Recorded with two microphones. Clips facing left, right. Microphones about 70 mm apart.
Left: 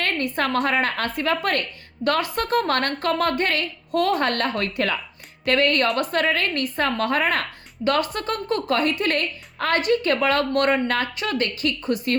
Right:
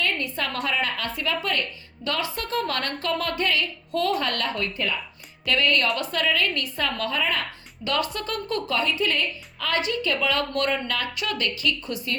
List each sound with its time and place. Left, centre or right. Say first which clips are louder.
0.0 s speech: left 4 dB; left
5.5 s speech: left 3 dB; left
7.9 s speech: left 4 dB; left